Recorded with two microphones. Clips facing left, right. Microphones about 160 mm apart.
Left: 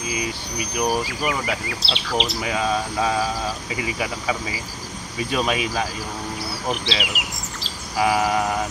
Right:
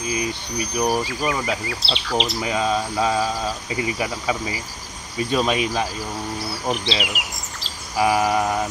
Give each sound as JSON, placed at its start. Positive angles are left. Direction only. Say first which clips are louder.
{"t": 0.2, "sound": "speech", "louder": "right 2 dB", "side_deg": 20}
{"t": 1.0, "sound": "speech", "louder": "right 1 dB", "side_deg": 0}
{"t": 2.4, "sound": "cricket", "louder": "right 1 dB", "side_deg": -20}
{"t": 5.3, "sound": "cricket", "louder": "right 2 dB", "side_deg": -20}
{"t": 6.7, "sound": "bird vocalization", "louder": "right 2 dB", "side_deg": 0}
{"t": 8.0, "sound": "a sound", "louder": "right 1 dB", "side_deg": -15}